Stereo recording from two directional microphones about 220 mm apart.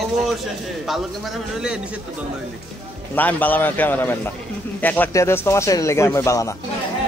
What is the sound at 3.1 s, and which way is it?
Speech, 10° left (ahead or behind).